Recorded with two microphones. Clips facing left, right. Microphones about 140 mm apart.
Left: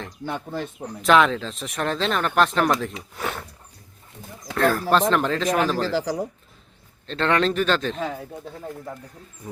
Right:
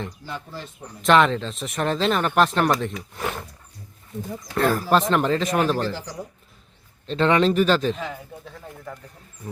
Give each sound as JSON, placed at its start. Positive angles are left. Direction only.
{"t": 0.3, "sound": "speech", "side_deg": 60}
{"t": 1.0, "sound": "speech", "side_deg": 0}
{"t": 4.5, "sound": "speech", "side_deg": 0}
{"t": 5.8, "sound": "speech", "side_deg": 90}
{"t": 7.1, "sound": "speech", "side_deg": -5}